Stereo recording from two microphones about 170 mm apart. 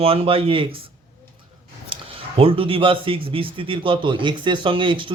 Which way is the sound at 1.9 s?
30° right (ahead or behind).